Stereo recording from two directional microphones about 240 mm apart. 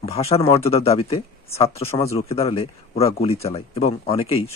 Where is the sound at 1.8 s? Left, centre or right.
Centre.